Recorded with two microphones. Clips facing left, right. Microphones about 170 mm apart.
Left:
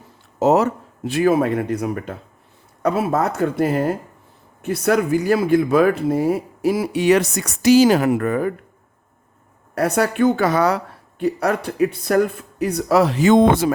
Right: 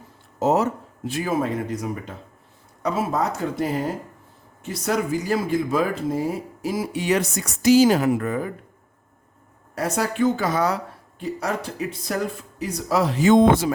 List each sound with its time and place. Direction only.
0.3 s speech: 75° left (ahead or behind)
9.7 s speech: 65° left (ahead or behind)